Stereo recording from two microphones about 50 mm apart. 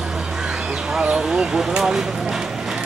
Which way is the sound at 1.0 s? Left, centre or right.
Centre.